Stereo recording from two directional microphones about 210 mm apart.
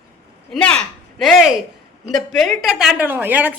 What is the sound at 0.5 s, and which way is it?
A woman's voice, 5° left (ahead or behind).